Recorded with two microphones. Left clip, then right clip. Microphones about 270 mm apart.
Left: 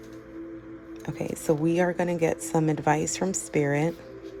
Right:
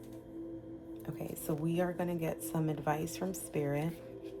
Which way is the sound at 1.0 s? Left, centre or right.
Left.